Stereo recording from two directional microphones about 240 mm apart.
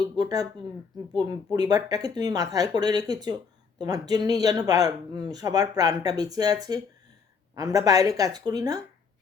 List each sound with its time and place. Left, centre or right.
0.2 s speech: centre